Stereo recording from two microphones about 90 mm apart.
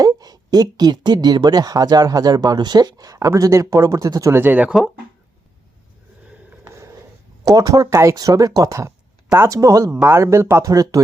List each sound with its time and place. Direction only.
0.0 s speech: 45° right (ahead or behind)
4.3 s speech: 25° right (ahead or behind)
7.4 s speech: 40° right (ahead or behind)